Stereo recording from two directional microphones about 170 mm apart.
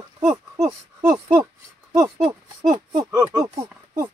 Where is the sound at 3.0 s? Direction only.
20° right (ahead or behind).